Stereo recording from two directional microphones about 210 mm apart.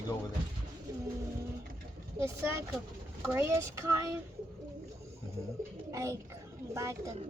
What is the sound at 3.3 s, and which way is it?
Speech, 10° right (ahead or behind).